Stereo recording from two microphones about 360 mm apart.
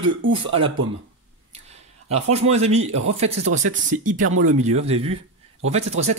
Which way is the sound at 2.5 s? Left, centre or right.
Centre.